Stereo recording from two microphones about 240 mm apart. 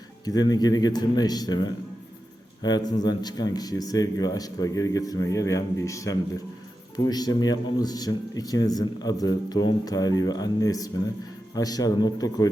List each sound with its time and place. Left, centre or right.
0.3 s speech: centre